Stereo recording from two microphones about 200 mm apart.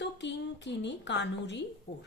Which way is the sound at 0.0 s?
60° left (ahead or behind).